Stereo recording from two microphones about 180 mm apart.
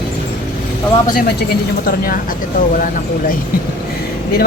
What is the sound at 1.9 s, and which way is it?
Speech, 55° left (ahead or behind).